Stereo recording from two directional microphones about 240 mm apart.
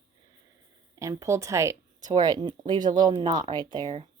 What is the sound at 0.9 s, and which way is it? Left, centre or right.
Speech, centre.